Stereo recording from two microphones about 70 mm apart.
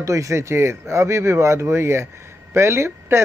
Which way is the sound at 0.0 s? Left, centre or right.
Right.